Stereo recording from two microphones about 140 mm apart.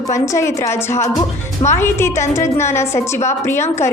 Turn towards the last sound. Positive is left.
turn(degrees=20)  # may be behind; listen again after turning